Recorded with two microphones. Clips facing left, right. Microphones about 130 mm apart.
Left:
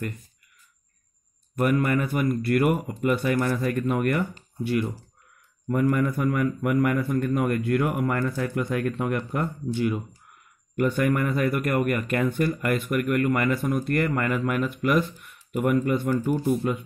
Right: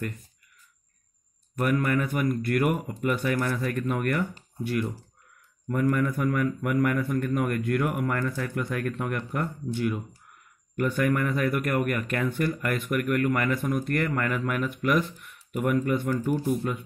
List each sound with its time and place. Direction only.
1.6 s speech: 5° left (ahead or behind)